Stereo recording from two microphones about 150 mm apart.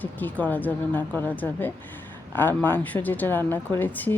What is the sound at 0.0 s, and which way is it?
Speech, 10° left (ahead or behind).